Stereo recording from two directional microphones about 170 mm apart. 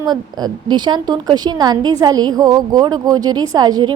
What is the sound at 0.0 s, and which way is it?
A woman's voice, 25° right (ahead or behind).